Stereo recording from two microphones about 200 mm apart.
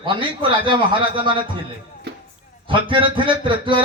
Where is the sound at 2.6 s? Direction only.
25° right (ahead or behind).